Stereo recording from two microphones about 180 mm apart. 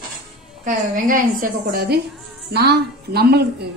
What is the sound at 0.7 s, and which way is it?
A woman's voice, 50° right (ahead or behind).